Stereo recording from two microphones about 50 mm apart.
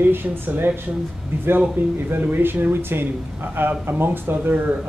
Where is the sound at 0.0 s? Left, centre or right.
Right.